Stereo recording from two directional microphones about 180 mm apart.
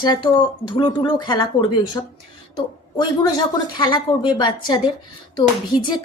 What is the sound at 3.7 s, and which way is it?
Speech, 25° left (ahead or behind).